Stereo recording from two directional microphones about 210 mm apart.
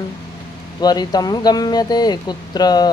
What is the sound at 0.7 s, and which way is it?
Speech, 20° left (ahead or behind).